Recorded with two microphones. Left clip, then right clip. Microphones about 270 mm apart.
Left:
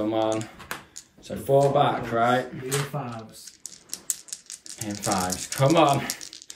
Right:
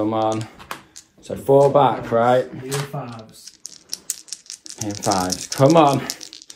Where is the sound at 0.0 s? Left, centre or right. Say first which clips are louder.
Right 4 dB; centre.